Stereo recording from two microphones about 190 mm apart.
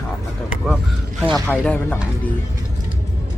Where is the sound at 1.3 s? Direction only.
5° left (ahead or behind).